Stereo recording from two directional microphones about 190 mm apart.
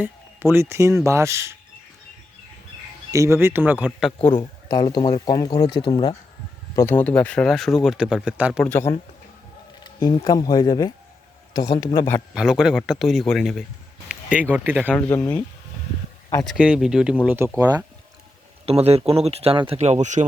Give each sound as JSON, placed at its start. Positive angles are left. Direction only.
{"t": 0.0, "sound": "speech", "side_deg": -10}
{"t": 3.1, "sound": "speech", "side_deg": -15}
{"t": 4.2, "sound": "speech", "side_deg": 25}
{"t": 6.7, "sound": "speech", "side_deg": 15}
{"t": 8.6, "sound": "a man's voice", "side_deg": 10}
{"t": 9.8, "sound": "a man's voice", "side_deg": 20}
{"t": 12.3, "sound": "speech", "side_deg": -5}
{"t": 14.9, "sound": "a man's voice", "side_deg": 10}
{"t": 16.4, "sound": "speech", "side_deg": 0}
{"t": 18.6, "sound": "speech", "side_deg": -30}